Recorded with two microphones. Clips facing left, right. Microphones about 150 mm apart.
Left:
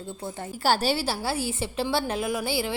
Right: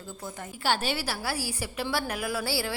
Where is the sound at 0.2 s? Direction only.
30° left (ahead or behind).